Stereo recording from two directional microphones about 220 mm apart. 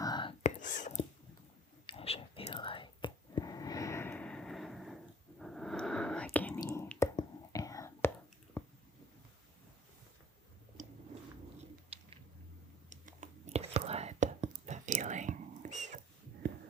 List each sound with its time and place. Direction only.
0.0 s whispering: 20° left (ahead or behind)
0.6 s whispering: 35° left (ahead or behind); by 8.1 s 15° left (ahead or behind)
8.6 s squish: 5° left (ahead or behind)
11.9 s a sound: 25° right (ahead or behind)
12.9 s whispering: 35° right (ahead or behind)